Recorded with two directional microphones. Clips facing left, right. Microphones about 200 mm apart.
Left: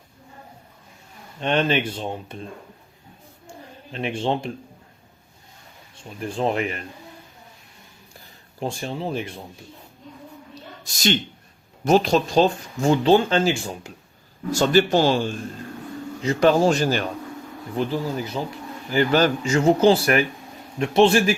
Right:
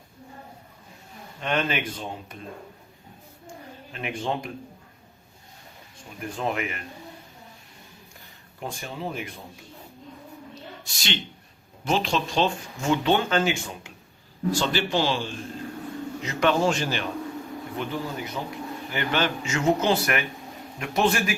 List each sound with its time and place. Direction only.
1.4 s speech: 30° left (ahead or behind)
3.9 s speech: 30° left (ahead or behind)
6.1 s speech: 30° left (ahead or behind)
8.6 s speech: 30° left (ahead or behind)
10.8 s speech: 45° left (ahead or behind)
14.5 s speech: 45° left (ahead or behind)
16.2 s speech: 35° left (ahead or behind)